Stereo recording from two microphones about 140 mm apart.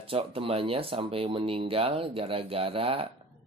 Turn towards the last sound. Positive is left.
turn(degrees=-40)  # may be behind; listen again after turning